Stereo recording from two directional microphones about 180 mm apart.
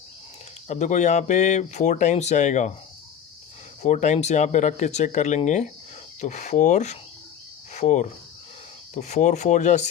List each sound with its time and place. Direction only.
0.7 s speech: 40° left (ahead or behind)
3.8 s speech: 40° left (ahead or behind)